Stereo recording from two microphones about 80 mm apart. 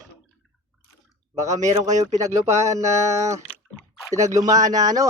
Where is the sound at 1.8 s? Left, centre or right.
Right.